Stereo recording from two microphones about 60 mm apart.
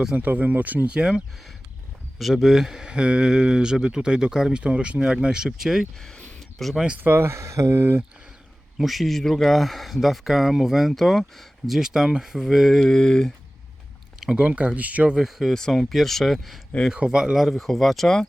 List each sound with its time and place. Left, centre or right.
0.2 s speech: right
0.9 s speech: centre
2.1 s speech: centre
7.0 s speech: right
8.8 s speech: centre
11.8 s speech: centre
14.2 s speech: centre
15.1 s speech: centre
16.9 s speech: centre
17.3 s speech: centre